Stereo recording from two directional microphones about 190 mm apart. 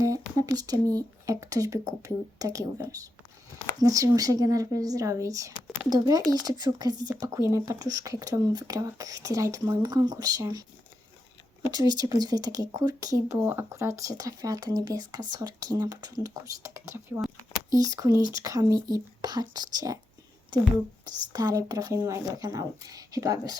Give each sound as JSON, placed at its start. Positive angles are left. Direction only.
{"t": 0.0, "sound": "speech", "side_deg": -20}
{"t": 11.7, "sound": "speech", "side_deg": -20}
{"t": 21.0, "sound": "speech", "side_deg": -20}